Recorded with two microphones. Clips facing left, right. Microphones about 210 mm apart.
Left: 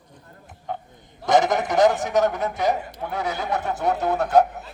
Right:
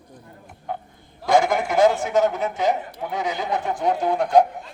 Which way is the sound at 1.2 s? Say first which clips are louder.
Even; 20° left (ahead or behind).